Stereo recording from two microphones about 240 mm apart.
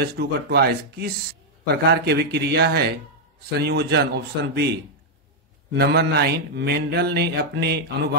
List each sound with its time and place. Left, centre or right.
0.0 s speech: right
3.4 s mantra: right